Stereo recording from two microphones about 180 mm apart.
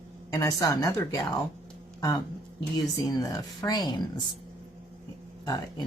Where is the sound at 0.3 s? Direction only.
20° left (ahead or behind).